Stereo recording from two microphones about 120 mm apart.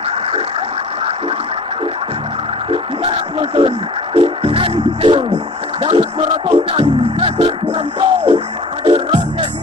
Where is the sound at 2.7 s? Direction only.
50° right (ahead or behind).